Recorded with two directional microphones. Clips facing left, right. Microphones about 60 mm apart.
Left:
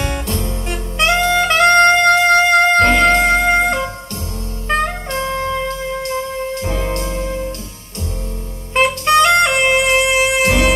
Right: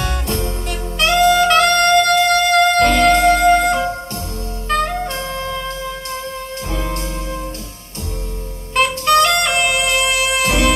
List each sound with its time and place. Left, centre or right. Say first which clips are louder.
0.7 s saxophone: left 2 dB; left
4.6 s music: even; left
6.6 s music: left 3 dB; left
8.7 s music: left 1 dB; left